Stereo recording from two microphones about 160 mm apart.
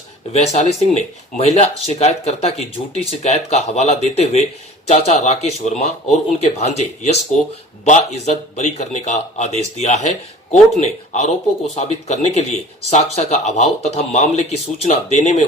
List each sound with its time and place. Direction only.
0.3 s speech: 45° left (ahead or behind)